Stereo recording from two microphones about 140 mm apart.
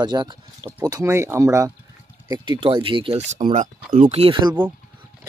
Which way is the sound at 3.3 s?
60° right (ahead or behind).